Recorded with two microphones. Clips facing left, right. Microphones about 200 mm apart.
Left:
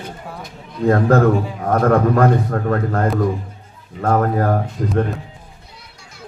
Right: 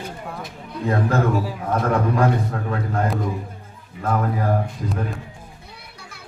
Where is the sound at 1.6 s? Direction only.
55° left (ahead or behind).